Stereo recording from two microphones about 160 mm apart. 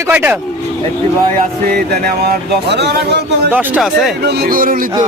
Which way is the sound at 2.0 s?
80° right.